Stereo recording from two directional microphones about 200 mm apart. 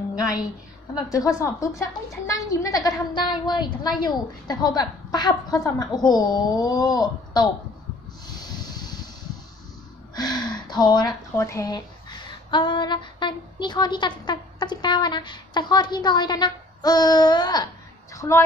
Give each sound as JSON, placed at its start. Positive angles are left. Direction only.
{"t": 0.9, "sound": "a woman's voice", "side_deg": 15}
{"t": 8.3, "sound": "snort", "side_deg": 20}
{"t": 10.1, "sound": "a woman's voice", "side_deg": 20}